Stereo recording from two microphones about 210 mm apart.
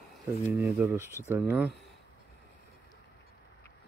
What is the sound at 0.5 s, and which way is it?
Speech, 10° right (ahead or behind).